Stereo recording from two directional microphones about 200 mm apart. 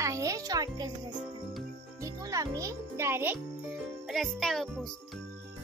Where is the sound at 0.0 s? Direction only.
15° right (ahead or behind).